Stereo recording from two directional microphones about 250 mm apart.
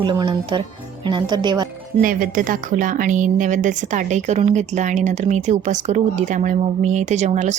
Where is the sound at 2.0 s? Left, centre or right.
Right.